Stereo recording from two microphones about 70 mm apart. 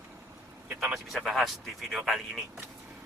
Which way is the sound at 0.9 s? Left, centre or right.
Centre.